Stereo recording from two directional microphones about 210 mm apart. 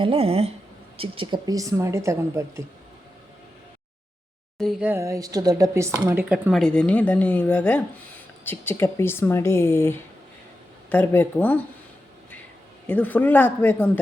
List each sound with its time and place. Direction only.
0.0 s a woman's voice: 25° right (ahead or behind)
4.5 s speech: centre (ahead or behind)
12.9 s speech: 10° left (ahead or behind)